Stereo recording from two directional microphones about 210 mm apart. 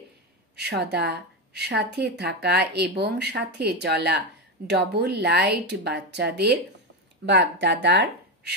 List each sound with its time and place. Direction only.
0.6 s speech: 50° right (ahead or behind)